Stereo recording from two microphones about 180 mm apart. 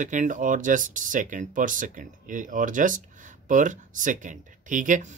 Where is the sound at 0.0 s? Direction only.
45° right (ahead or behind).